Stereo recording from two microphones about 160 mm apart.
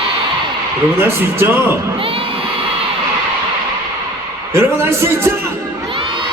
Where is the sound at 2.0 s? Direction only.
35° right (ahead or behind).